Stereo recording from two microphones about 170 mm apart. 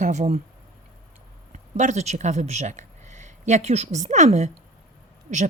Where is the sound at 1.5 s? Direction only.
45° right (ahead or behind).